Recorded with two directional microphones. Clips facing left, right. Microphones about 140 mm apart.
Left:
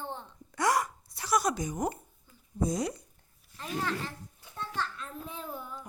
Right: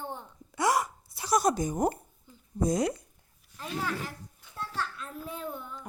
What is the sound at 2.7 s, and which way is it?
Speech, 55° right (ahead or behind).